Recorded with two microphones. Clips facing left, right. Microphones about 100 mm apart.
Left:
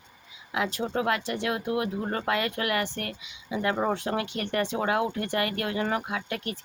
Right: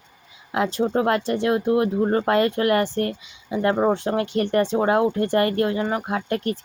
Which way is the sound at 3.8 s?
25° right (ahead or behind).